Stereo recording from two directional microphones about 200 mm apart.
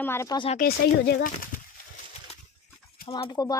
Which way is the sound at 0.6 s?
50° left (ahead or behind).